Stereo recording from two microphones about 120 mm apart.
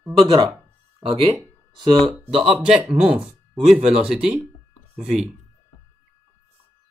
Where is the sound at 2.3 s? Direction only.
55° right (ahead or behind).